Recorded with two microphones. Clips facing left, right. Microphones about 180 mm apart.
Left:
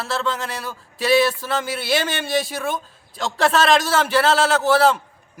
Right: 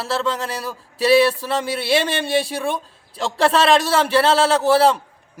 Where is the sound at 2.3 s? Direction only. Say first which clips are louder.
Right 1 dB; 30° right (ahead or behind).